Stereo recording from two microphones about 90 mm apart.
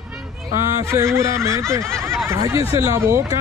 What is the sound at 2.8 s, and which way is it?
Speech, 30° right (ahead or behind).